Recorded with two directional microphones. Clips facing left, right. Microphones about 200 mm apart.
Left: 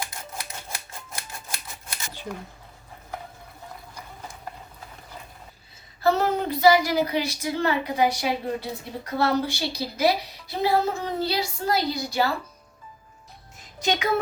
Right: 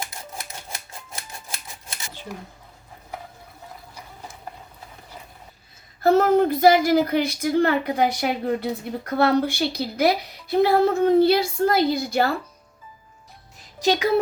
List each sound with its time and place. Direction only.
0.0 s typewriter: 25° right (ahead or behind)
6.0 s a woman's voice: 50° right (ahead or behind)